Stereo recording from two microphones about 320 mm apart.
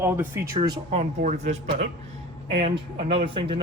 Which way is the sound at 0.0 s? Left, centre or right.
Centre.